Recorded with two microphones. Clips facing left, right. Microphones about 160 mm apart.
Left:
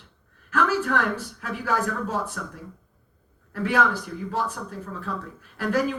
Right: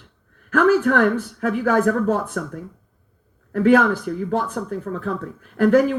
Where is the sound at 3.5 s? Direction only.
55° right (ahead or behind).